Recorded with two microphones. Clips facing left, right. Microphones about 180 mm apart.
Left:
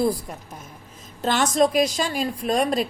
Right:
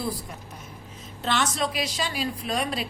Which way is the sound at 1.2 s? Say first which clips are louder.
Left 7 dB; 45° left (ahead or behind).